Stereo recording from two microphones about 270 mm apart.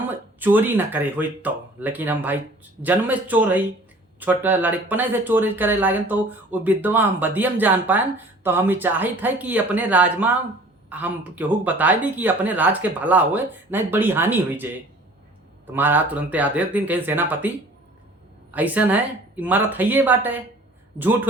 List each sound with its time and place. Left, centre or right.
0.1 s speech: centre
15.7 s speech: centre
18.5 s speech: centre